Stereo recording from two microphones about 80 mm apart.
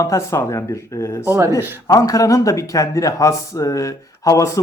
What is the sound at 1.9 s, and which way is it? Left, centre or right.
A man's voice, left.